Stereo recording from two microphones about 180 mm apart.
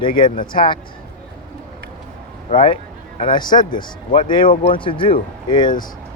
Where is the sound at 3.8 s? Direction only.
45° left (ahead or behind).